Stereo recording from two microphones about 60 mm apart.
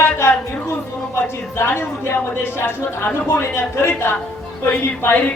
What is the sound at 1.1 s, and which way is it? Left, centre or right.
A woman's voice, left.